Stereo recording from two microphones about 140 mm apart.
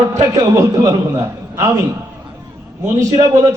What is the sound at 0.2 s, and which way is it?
A man's voice, 20° right (ahead or behind).